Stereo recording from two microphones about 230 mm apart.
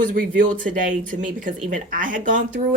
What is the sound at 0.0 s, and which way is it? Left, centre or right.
Speech, right.